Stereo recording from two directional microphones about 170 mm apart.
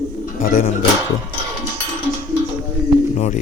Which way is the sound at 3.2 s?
40° left (ahead or behind).